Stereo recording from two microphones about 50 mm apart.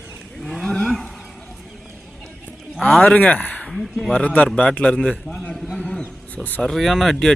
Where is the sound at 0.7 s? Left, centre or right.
Centre.